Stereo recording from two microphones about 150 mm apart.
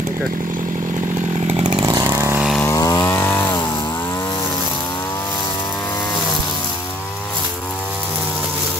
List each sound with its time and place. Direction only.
1.6 s chainsaw: 40° right (ahead or behind)
1.9 s vehicle: 20° right (ahead or behind)
2.6 s chainsaw: 20° left (ahead or behind)